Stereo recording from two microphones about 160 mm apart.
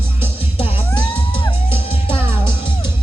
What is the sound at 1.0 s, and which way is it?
Music, 35° left (ahead or behind).